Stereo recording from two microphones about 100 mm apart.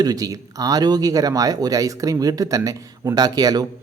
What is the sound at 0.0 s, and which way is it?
Speech, 40° right (ahead or behind).